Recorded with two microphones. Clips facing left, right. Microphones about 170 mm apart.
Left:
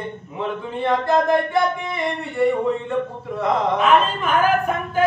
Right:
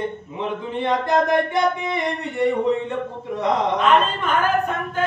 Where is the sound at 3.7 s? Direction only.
5° left (ahead or behind).